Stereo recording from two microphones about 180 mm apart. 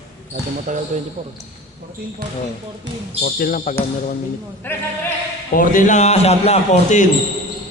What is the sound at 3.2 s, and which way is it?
Speech, 55° left (ahead or behind).